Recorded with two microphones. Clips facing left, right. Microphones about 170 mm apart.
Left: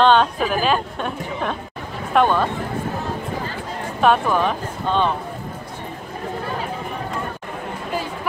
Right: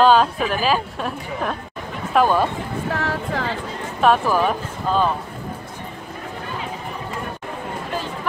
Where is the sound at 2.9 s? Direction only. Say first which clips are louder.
Right 2 dB; 85° right.